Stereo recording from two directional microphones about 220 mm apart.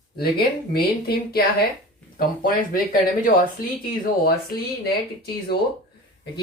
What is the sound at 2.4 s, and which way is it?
Speech, 40° left (ahead or behind).